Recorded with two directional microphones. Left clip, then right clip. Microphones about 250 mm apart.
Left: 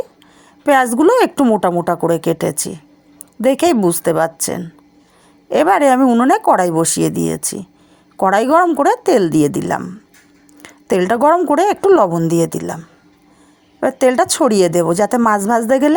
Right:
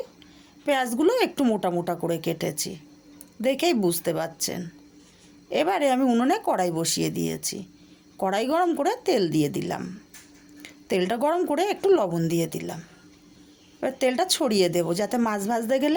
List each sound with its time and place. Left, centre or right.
0.6 s a woman's voice: left